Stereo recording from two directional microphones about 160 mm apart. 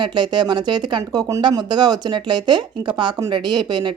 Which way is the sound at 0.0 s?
30° right (ahead or behind).